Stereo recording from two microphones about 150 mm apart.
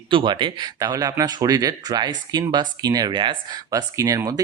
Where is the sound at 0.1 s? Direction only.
35° right (ahead or behind).